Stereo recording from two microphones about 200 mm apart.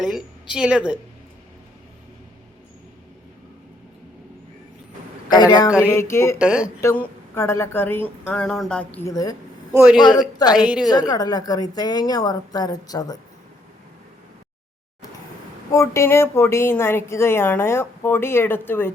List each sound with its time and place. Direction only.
0.0 s a woman's voice: centre (ahead or behind)
5.3 s a woman's voice: 20° left (ahead or behind)
6.4 s a woman's voice: 5° right (ahead or behind)
6.8 s a woman's voice: 10° left (ahead or behind)
9.7 s a woman's voice: 5° right (ahead or behind)
10.2 s a woman's voice: 20° left (ahead or behind)
10.5 s a woman's voice: 5° right (ahead or behind)
10.8 s a woman's voice: 20° left (ahead or behind)
15.7 s a woman's voice: 15° left (ahead or behind)